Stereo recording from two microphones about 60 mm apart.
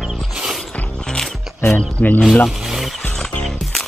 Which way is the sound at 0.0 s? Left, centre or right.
Centre.